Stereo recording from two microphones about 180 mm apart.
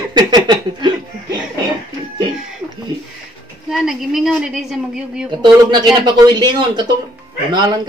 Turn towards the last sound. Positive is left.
turn(degrees=-25)  # may be behind; listen again after turning